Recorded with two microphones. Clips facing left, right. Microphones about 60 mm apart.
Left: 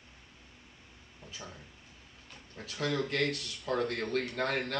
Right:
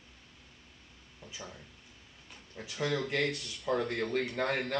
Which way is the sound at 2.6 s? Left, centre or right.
Centre.